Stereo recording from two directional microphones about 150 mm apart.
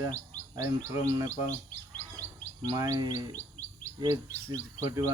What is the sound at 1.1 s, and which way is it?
Speech, 20° right (ahead or behind).